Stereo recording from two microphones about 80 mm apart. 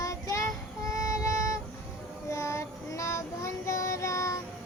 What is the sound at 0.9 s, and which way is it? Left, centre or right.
Music, left.